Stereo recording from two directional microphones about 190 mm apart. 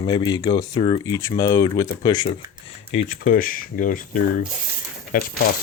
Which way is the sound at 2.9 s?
45° left (ahead or behind).